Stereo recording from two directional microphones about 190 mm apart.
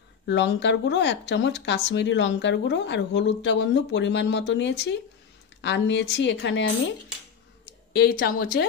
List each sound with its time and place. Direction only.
0.3 s speech: 70° left (ahead or behind)
7.9 s speech: 55° left (ahead or behind)